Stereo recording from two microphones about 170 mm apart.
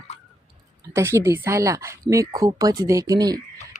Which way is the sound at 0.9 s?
15° right (ahead or behind).